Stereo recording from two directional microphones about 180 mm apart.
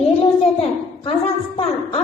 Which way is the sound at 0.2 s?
35° left (ahead or behind).